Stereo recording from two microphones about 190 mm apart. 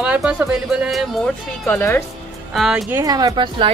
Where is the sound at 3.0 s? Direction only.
20° right (ahead or behind).